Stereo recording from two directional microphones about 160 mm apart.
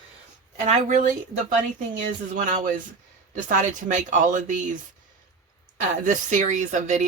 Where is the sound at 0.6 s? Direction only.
50° right (ahead or behind).